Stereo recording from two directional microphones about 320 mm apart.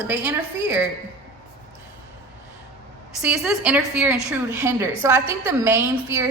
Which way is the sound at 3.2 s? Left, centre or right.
Centre.